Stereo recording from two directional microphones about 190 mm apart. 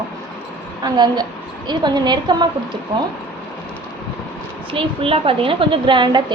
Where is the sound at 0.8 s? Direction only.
20° right (ahead or behind).